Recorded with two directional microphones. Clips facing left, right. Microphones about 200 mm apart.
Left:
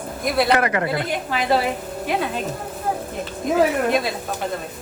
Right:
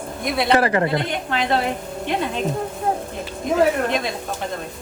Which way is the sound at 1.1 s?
5° left (ahead or behind).